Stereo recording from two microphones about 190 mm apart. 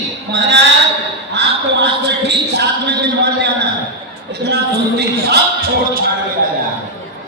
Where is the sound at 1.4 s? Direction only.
65° right (ahead or behind).